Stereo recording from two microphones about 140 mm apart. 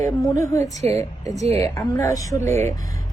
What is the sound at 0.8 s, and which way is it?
Speech, 50° right (ahead or behind).